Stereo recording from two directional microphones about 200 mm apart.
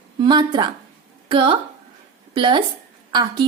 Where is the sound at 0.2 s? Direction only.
20° right (ahead or behind).